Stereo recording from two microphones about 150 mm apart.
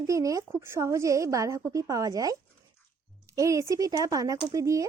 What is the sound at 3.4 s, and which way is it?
A woman's voice, 20° right (ahead or behind).